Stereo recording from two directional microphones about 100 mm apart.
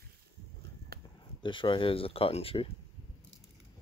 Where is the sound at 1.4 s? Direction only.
55° left (ahead or behind).